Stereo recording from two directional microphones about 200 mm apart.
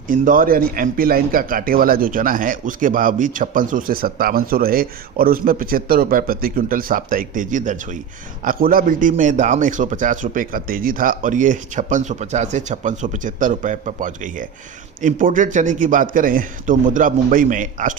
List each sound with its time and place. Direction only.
0.1 s a man's voice: 45° right (ahead or behind)